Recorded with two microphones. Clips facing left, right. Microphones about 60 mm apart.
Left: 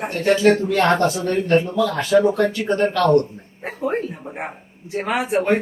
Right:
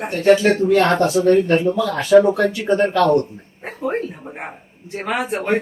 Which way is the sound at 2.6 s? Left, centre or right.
Centre.